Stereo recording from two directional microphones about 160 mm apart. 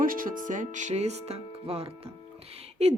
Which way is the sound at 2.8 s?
40° right (ahead or behind).